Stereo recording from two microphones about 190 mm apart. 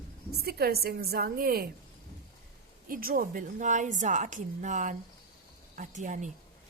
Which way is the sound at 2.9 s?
50° right (ahead or behind).